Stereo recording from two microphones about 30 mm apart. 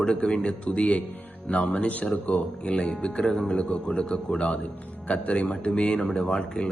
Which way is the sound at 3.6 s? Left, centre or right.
Left.